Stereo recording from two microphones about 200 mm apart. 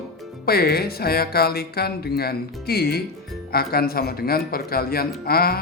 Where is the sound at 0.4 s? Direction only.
50° left (ahead or behind).